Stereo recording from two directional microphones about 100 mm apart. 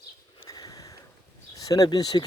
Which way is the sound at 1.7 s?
40° left (ahead or behind).